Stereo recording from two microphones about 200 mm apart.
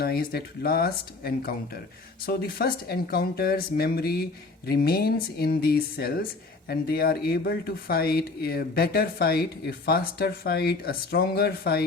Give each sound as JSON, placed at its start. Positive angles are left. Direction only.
{"t": 0.0, "sound": "speech", "side_deg": 50}